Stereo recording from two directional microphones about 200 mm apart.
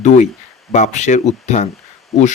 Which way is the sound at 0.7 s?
35° left (ahead or behind).